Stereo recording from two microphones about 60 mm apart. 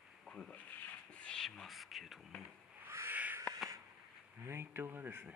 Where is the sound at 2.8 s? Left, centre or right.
Right.